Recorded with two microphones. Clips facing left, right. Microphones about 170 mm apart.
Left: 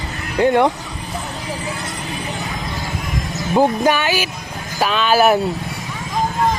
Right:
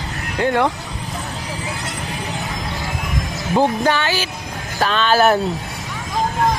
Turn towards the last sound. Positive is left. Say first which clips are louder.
# left 1 dB
turn(degrees=10)  # may be behind; listen again after turning